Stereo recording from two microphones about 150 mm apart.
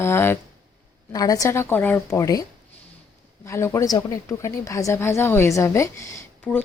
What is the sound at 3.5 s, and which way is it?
Speech, 20° left (ahead or behind).